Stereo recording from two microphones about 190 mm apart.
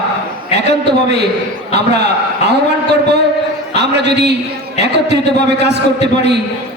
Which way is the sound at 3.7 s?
65° right (ahead or behind).